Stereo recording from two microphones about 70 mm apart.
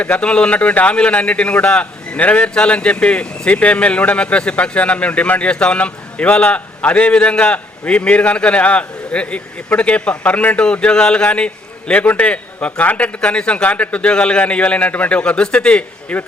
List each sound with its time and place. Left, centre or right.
0.0 s a man's voice: centre